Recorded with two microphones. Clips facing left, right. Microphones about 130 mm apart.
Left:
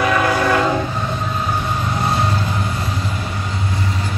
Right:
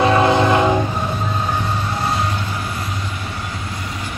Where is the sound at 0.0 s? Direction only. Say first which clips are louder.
Right 3 dB; 25° right (ahead or behind).